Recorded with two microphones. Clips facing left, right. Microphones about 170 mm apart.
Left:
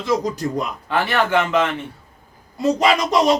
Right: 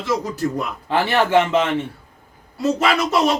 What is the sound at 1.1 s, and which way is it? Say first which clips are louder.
Speech: right 3 dB; 25° right (ahead or behind).